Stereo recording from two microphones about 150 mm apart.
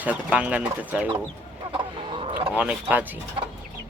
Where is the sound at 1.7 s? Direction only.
35° right (ahead or behind).